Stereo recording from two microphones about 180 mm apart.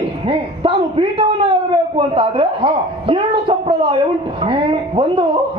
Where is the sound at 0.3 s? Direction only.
30° right (ahead or behind).